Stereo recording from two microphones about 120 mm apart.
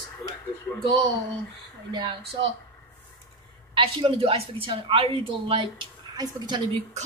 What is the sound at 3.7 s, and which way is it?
A woman's voice, 50° right (ahead or behind).